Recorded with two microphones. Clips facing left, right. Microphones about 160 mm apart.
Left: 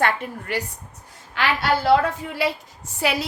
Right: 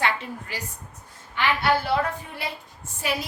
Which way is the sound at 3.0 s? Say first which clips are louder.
Left 5 dB; 80° left.